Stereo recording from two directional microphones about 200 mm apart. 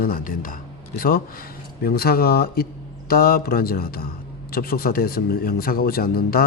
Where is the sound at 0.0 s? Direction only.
45° left (ahead or behind).